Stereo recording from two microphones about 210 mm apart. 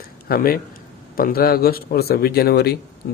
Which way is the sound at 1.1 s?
45° left (ahead or behind).